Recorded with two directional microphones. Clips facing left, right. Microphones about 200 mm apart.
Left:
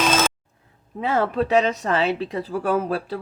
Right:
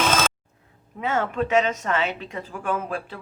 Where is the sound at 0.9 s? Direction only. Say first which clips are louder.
Left 3 dB; 35° left (ahead or behind).